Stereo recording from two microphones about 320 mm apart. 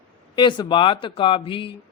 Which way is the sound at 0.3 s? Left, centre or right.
Centre.